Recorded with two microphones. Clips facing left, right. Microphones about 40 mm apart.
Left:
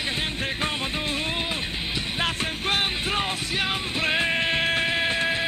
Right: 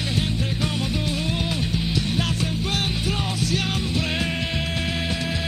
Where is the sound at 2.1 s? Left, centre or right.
Left.